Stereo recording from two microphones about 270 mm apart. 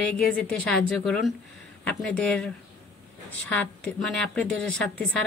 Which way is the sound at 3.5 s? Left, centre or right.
Centre.